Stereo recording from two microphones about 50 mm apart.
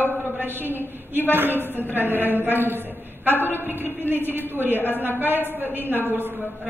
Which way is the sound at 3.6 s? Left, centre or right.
Right.